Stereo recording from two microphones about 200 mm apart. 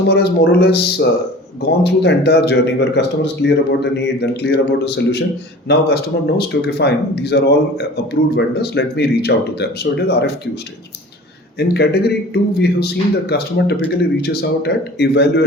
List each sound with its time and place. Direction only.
0.1 s a man's voice: 55° left (ahead or behind)
11.7 s a man's voice: 55° left (ahead or behind)